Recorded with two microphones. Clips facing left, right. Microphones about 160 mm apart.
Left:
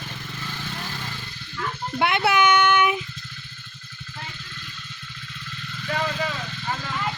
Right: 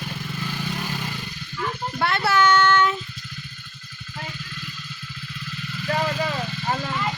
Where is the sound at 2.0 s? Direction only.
20° left (ahead or behind).